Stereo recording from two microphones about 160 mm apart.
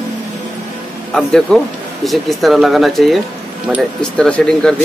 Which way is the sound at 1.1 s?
5° left (ahead or behind).